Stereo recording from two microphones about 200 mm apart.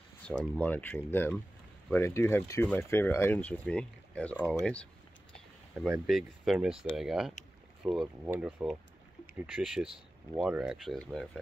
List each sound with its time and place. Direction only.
0.6 s speech: 10° left (ahead or behind)
6.0 s speech: centre (ahead or behind)